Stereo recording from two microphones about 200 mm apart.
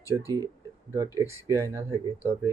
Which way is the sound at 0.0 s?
15° right (ahead or behind).